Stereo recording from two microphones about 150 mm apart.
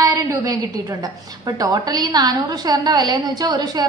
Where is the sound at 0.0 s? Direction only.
20° right (ahead or behind).